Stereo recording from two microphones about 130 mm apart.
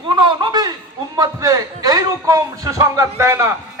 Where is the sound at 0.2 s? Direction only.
35° right (ahead or behind).